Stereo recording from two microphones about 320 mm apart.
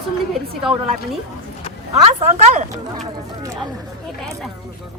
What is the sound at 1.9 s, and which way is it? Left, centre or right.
Speech, right.